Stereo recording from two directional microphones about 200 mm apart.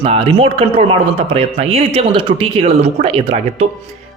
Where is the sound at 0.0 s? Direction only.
30° right (ahead or behind).